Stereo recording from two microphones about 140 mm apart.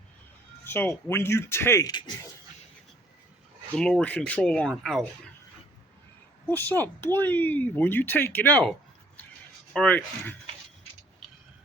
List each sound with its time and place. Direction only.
0.6 s speech: 15° left (ahead or behind)
3.8 s speech: 5° left (ahead or behind)
6.5 s speech: 15° left (ahead or behind)
9.7 s speech: 10° left (ahead or behind)